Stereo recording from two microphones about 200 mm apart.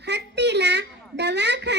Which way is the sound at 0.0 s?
55° right (ahead or behind).